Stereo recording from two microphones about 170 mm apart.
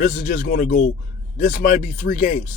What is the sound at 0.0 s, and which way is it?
A man's voice, 55° left (ahead or behind).